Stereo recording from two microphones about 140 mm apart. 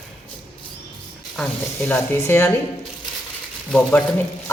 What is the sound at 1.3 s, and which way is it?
Speech, 10° left (ahead or behind).